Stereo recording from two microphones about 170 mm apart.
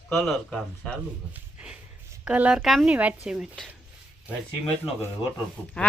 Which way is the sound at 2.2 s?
5° right (ahead or behind).